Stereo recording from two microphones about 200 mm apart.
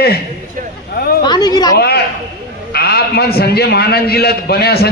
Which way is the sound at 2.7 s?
55° left (ahead or behind).